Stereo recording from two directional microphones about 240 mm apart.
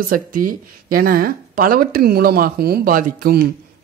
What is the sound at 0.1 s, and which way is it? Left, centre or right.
Speech, right.